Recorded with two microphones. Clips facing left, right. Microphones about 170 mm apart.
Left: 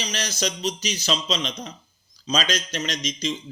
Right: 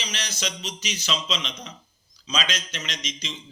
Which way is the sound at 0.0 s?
40° left (ahead or behind).